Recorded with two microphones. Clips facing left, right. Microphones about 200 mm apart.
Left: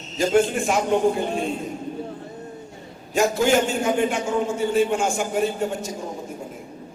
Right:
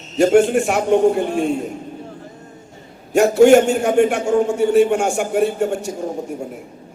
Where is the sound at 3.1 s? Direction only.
70° right (ahead or behind).